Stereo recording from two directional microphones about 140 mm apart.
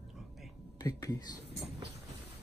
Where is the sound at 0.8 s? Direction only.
25° left (ahead or behind).